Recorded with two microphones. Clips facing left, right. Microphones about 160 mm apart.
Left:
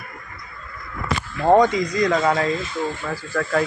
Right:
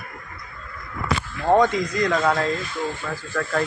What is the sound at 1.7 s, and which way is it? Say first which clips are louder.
Speech: left 2 dB; centre (ahead or behind).